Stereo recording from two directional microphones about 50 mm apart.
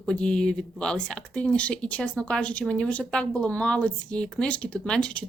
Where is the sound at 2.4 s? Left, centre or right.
Left.